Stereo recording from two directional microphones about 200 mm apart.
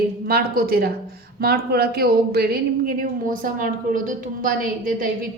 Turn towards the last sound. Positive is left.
turn(degrees=-45)  # may be behind; listen again after turning